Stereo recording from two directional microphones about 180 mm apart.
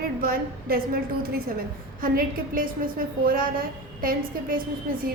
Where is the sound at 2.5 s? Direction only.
50° right (ahead or behind).